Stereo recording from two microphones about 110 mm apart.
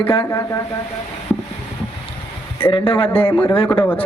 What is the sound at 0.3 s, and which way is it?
Speech, 30° left (ahead or behind).